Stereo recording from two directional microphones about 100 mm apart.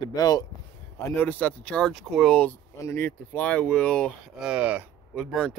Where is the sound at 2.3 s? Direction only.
15° left (ahead or behind).